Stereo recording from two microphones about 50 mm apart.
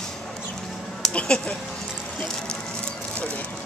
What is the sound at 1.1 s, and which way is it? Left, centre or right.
Speech, left.